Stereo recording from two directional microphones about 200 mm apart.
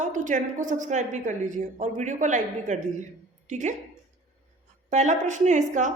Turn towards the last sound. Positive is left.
turn(degrees=-40)  # may be behind; listen again after turning